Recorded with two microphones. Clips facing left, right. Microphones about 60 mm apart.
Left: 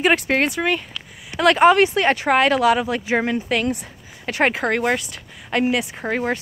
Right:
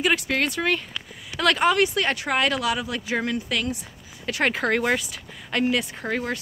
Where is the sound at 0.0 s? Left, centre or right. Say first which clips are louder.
Left 5 dB; left.